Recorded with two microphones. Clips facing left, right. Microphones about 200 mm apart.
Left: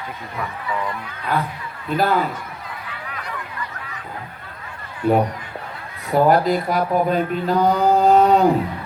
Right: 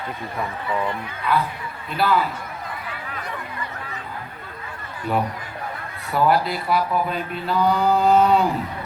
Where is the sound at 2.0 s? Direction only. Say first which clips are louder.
Left 1 dB; 45° left (ahead or behind).